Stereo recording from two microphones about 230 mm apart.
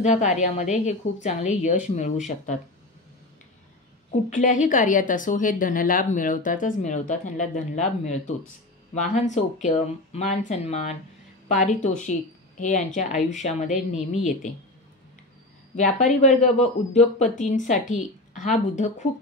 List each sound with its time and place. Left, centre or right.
0.0 s a woman's voice: left
4.4 s a woman's voice: left
15.7 s a woman's voice: left